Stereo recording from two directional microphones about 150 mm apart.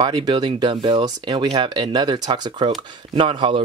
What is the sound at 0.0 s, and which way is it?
Speech, 30° right (ahead or behind).